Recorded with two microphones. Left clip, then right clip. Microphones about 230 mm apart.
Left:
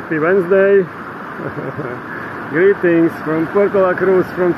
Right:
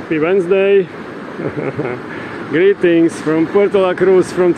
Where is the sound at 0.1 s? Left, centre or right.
Centre.